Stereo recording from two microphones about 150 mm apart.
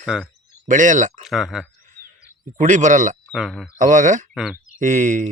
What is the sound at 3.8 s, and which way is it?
Speech, 60° right (ahead or behind).